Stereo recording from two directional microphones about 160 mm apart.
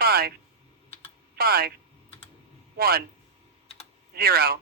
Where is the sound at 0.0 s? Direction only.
70° right (ahead or behind).